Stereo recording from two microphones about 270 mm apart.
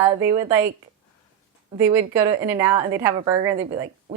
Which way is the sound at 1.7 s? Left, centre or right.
Centre.